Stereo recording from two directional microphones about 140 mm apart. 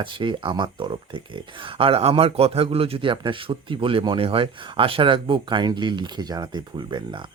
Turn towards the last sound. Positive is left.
turn(degrees=-30)  # may be behind; listen again after turning